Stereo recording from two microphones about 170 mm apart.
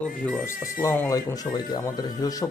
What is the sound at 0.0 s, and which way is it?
Speech, 5° left (ahead or behind).